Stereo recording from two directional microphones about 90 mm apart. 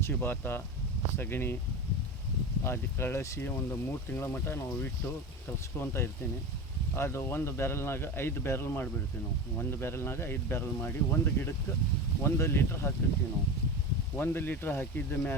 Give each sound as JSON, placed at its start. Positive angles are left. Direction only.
{"t": 0.0, "sound": "speech", "side_deg": 25}
{"t": 2.6, "sound": "speech", "side_deg": 30}
{"t": 14.2, "sound": "speech", "side_deg": 20}